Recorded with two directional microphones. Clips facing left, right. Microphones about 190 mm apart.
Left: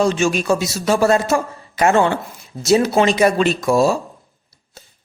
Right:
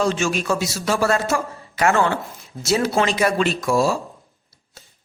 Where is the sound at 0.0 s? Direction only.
15° left (ahead or behind).